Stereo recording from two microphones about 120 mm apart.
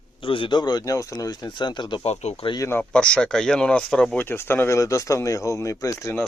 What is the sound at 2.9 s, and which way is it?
Speech, 10° left (ahead or behind).